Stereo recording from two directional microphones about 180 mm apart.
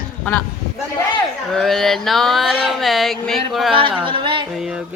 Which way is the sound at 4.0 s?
30° right (ahead or behind).